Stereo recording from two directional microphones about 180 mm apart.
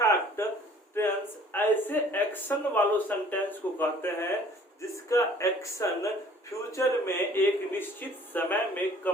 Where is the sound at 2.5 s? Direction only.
10° left (ahead or behind).